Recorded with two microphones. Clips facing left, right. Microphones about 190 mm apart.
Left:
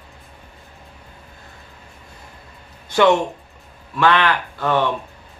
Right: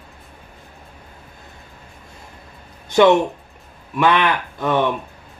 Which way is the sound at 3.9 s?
15° right (ahead or behind).